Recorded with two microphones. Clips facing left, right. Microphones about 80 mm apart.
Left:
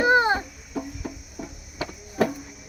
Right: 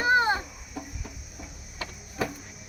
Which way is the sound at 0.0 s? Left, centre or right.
Left.